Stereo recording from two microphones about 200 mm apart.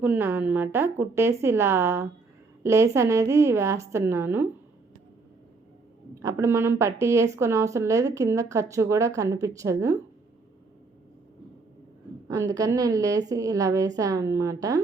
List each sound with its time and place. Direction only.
0.0 s speech: 10° right (ahead or behind)
6.2 s speech: 15° right (ahead or behind)
12.3 s speech: 20° right (ahead or behind)